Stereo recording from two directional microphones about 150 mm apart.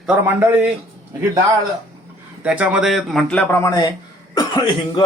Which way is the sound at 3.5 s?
20° left (ahead or behind).